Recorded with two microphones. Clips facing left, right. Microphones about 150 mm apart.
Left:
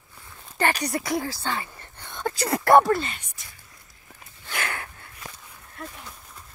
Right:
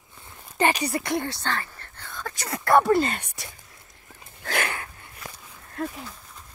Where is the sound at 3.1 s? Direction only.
65° right (ahead or behind).